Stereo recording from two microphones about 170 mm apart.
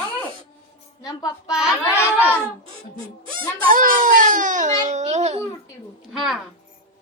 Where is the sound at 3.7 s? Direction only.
55° right (ahead or behind).